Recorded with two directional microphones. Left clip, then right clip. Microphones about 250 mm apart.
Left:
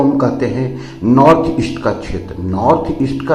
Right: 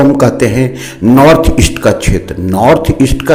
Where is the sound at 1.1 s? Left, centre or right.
Right.